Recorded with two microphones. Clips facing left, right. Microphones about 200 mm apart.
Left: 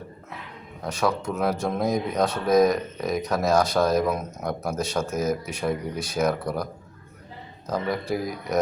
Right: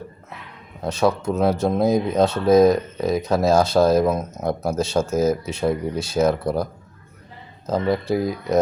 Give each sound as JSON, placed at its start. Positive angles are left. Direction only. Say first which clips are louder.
{"t": 0.8, "sound": "speech", "louder": "right 5 dB", "side_deg": -25}
{"t": 7.7, "sound": "speech", "louder": "right 6 dB", "side_deg": -25}